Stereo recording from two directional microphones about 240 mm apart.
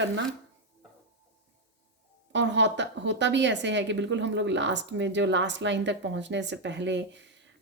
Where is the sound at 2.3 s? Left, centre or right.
Right.